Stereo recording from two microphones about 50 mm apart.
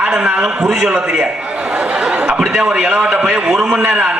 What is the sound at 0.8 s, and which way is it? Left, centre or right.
Speech, centre.